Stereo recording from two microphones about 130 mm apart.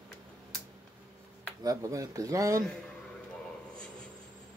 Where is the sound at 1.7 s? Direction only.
25° right (ahead or behind).